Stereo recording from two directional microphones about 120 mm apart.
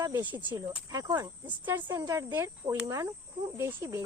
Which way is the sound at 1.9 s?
25° right (ahead or behind).